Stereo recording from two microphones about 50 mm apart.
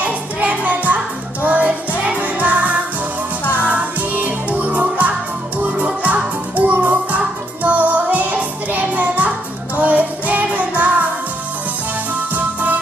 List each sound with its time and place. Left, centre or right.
0.0 s music: right
12.3 s music: right